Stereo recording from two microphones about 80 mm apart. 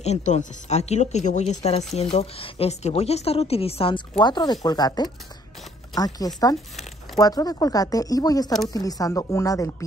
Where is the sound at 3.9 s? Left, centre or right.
Left.